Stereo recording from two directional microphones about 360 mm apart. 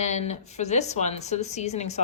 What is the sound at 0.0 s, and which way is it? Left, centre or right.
Speech, centre.